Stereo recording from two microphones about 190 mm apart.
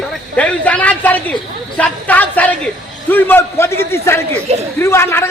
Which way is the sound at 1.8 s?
10° left (ahead or behind).